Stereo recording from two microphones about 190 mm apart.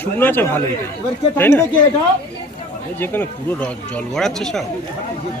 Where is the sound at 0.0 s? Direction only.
10° left (ahead or behind).